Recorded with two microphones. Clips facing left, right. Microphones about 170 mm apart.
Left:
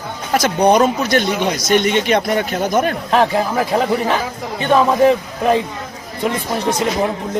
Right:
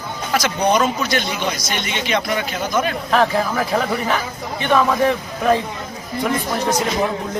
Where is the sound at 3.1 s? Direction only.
25° left (ahead or behind).